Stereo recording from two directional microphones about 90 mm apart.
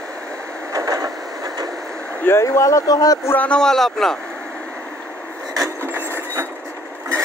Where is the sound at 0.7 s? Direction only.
40° right (ahead or behind).